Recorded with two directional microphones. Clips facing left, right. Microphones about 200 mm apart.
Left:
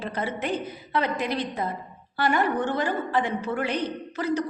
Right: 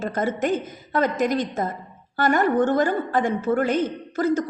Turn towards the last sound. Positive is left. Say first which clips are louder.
# right 5 dB
turn(degrees=-45)  # may be behind; listen again after turning